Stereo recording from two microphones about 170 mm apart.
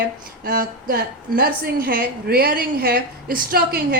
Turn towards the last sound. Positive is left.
turn(degrees=-65)  # may be behind; listen again after turning